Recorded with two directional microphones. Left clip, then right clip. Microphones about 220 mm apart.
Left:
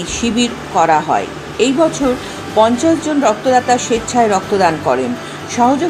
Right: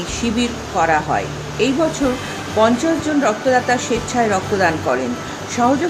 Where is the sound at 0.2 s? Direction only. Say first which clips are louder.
Left 4 dB; 15° left (ahead or behind).